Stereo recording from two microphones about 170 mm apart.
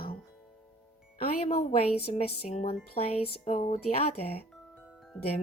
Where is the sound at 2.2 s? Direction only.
45° left (ahead or behind).